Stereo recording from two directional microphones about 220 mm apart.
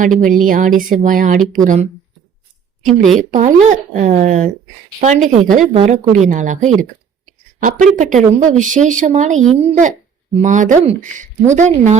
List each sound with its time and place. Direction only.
0.2 s speech: 35° right (ahead or behind)
2.8 s a woman's voice: centre (ahead or behind)
3.3 s speech: 35° right (ahead or behind)
7.7 s speech: 35° right (ahead or behind)